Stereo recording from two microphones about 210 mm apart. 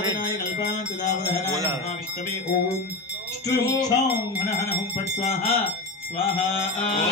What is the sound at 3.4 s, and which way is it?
Music, 15° left (ahead or behind).